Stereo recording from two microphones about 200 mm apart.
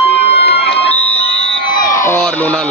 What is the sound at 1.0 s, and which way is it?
Fire alarm, 30° left (ahead or behind).